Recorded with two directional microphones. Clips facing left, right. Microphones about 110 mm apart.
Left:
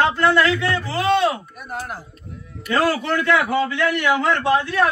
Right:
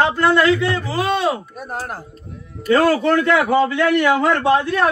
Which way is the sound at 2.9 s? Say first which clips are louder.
Right 4 dB; 35° right (ahead or behind).